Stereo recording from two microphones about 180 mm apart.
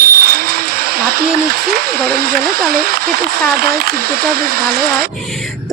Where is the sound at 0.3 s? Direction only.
55° right (ahead or behind).